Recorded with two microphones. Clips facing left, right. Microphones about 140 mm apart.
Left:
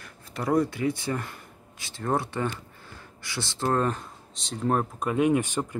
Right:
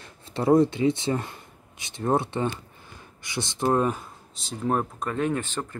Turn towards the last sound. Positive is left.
turn(degrees=15)  # may be behind; listen again after turning